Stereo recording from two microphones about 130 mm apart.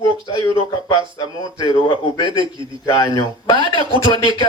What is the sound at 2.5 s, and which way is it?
Speech, 40° right (ahead or behind).